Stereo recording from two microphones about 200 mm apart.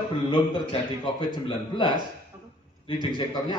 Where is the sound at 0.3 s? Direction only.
25° left (ahead or behind).